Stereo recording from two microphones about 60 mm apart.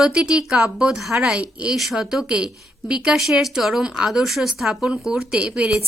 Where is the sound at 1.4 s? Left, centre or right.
Centre.